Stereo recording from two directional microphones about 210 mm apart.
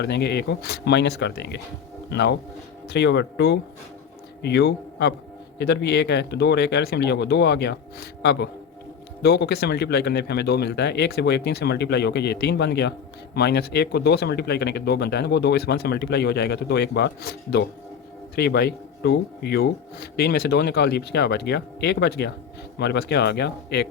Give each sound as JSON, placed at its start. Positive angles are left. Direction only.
{"t": 0.0, "sound": "speech", "side_deg": 55}